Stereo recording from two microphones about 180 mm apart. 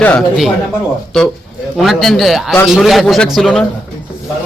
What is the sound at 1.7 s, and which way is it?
A man's voice, centre (ahead or behind).